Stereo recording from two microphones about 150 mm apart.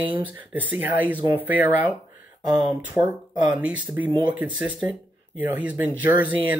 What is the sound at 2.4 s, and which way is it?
Speech, 25° right (ahead or behind).